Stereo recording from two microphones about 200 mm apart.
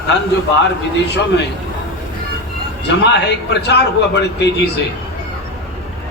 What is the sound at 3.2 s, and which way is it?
A man's voice, 55° left (ahead or behind).